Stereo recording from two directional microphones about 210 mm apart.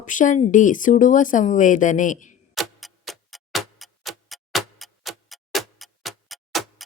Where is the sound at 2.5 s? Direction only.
Centre (ahead or behind).